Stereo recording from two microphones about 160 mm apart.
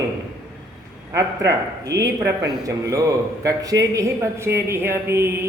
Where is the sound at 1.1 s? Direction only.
20° right (ahead or behind).